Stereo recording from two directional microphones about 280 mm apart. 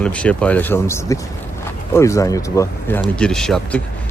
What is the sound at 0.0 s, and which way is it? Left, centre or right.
Speech, centre.